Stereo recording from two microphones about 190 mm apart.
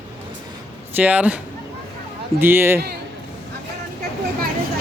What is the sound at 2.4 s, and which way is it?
Speech, 10° right (ahead or behind).